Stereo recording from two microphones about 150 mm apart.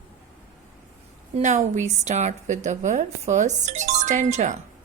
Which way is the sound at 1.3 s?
50° right (ahead or behind).